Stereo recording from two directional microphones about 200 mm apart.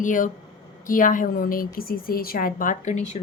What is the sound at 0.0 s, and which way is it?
A woman's voice, 40° left (ahead or behind).